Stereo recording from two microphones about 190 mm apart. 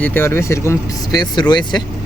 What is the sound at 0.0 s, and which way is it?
Speech, 10° left (ahead or behind).